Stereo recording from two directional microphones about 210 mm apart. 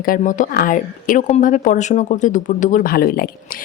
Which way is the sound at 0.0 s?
40° left (ahead or behind).